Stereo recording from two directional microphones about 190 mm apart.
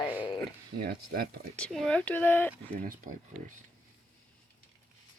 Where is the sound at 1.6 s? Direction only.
5° left (ahead or behind).